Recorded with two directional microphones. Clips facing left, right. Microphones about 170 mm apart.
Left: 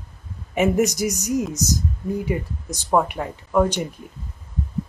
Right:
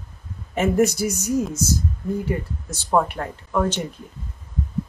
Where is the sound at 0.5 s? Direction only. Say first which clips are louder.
Even; 15° left (ahead or behind).